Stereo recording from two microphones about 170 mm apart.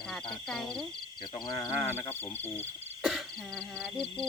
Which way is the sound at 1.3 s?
25° left (ahead or behind).